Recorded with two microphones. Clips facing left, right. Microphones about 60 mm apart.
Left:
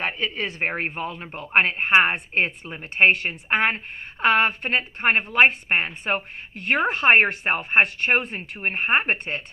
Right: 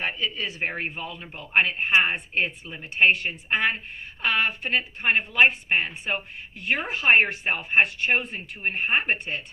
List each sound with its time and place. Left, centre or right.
0.0 s a woman's voice: left